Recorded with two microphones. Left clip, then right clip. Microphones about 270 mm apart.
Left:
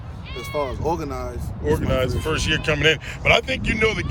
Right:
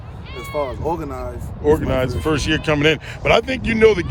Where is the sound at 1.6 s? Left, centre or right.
Right.